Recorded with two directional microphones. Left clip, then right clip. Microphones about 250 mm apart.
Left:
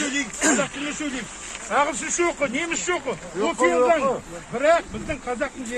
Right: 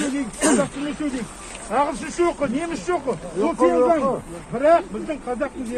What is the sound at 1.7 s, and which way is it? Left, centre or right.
Speech, left.